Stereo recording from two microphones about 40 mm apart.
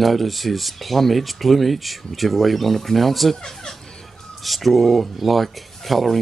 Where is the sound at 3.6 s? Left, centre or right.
Centre.